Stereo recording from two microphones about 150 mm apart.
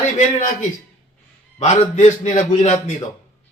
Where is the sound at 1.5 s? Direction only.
50° left (ahead or behind).